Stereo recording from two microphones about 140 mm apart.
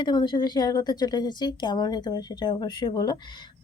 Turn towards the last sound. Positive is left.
turn(degrees=35)  # may be behind; listen again after turning